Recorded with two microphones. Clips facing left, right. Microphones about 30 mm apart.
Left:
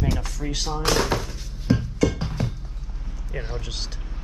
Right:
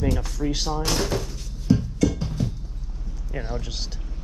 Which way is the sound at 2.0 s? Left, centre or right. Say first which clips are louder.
Even; left.